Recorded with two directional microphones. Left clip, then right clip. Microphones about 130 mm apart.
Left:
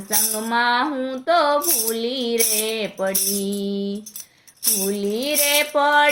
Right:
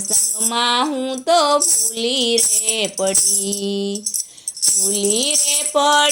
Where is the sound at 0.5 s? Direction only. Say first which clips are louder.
Right 1 dB; 15° right (ahead or behind).